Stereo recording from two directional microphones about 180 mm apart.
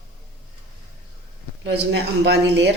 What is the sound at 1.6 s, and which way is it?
Speech, 70° right (ahead or behind).